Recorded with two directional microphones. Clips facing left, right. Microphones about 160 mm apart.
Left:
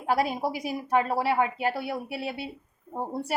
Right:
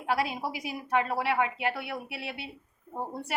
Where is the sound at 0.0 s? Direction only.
45° left (ahead or behind).